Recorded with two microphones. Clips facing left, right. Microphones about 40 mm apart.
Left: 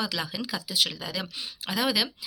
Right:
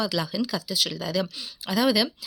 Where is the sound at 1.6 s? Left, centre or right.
Centre.